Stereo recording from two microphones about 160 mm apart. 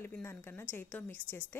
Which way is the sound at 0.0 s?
15° left (ahead or behind).